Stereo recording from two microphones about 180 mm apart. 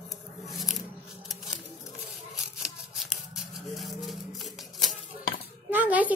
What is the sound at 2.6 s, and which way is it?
Scissors, centre (ahead or behind).